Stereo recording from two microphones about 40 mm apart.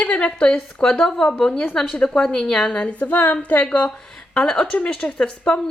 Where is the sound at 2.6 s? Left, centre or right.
Left.